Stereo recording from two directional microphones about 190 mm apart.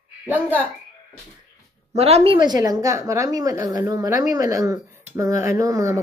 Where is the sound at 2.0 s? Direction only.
30° right (ahead or behind).